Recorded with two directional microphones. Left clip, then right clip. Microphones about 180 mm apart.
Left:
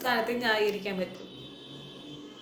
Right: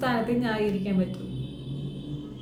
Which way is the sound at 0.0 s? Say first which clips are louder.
Right 1 dB; centre (ahead or behind).